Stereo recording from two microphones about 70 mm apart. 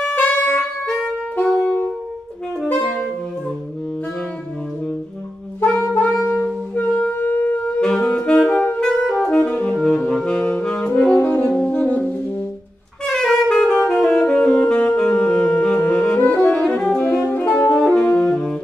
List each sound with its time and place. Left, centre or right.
0.0 s music: left
1.6 s saxophone: left
2.7 s saxophone: left
6.0 s saxophone: centre
6.3 s wind instrument: centre
6.8 s wind instrument: left
7.6 s saxophone: centre
13.0 s saxophone: centre